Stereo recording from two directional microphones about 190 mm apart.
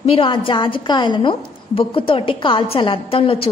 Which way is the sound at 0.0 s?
25° left (ahead or behind).